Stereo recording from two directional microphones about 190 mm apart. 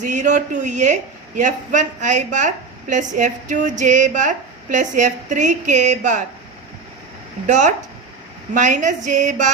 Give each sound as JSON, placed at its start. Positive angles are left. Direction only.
{"t": 0.0, "sound": "a woman's voice", "side_deg": -40}
{"t": 7.4, "sound": "a woman's voice", "side_deg": -40}